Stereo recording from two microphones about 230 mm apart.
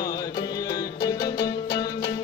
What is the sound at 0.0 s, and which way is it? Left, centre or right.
Music, centre.